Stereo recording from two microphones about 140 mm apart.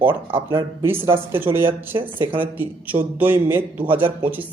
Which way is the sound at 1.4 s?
15° right (ahead or behind).